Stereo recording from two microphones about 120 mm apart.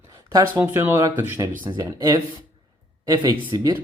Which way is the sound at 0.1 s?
30° right (ahead or behind).